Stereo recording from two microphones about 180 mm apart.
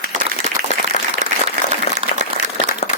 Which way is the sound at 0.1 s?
40° right (ahead or behind).